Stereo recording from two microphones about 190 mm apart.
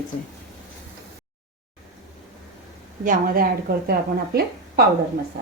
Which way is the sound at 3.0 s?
45° right (ahead or behind).